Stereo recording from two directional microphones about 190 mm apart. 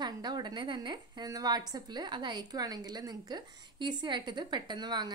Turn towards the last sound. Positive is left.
turn(degrees=-20)  # may be behind; listen again after turning